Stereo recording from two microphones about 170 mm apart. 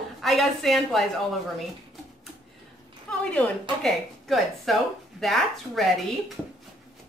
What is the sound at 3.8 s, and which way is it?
Speech, centre (ahead or behind).